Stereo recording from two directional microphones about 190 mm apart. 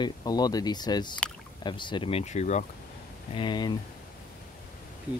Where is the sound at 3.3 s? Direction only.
25° left (ahead or behind).